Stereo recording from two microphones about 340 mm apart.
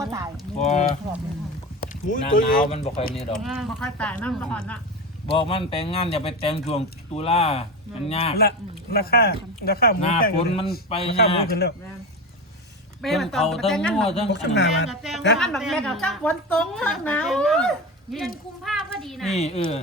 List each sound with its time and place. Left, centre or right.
0.0 s a sound: centre
0.6 s speech: centre
3.3 s a woman's voice: centre
5.3 s speech: centre
13.0 s a woman's voice: centre
14.3 s speech: left
14.8 s a woman's voice: centre
19.3 s speech: centre